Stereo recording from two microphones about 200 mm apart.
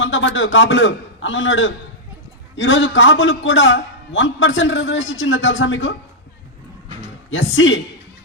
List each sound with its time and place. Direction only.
0.0 s a man's voice: 70° left (ahead or behind)
7.3 s a man's voice: 70° left (ahead or behind)